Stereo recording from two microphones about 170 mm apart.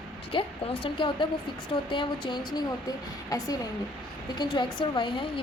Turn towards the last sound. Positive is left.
turn(degrees=30)  # may be behind; listen again after turning